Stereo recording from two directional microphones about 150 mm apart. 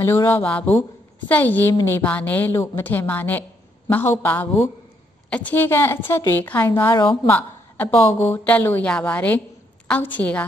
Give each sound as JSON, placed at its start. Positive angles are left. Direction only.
{"t": 0.0, "sound": "a woman's voice", "side_deg": 15}